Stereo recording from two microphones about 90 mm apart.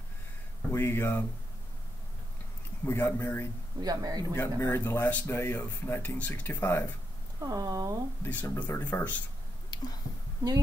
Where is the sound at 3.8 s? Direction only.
45° right (ahead or behind).